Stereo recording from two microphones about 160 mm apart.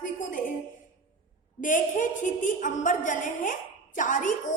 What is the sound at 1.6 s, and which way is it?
A woman's voice, 55° left (ahead or behind).